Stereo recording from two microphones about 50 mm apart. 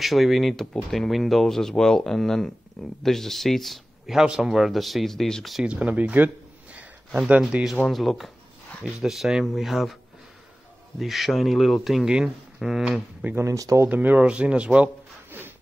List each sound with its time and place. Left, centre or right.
0.0 s speech: centre
4.2 s speech: centre
5.6 s speech: right
7.9 s speech: centre
11.0 s speech: centre
13.4 s speech: right
13.8 s speech: right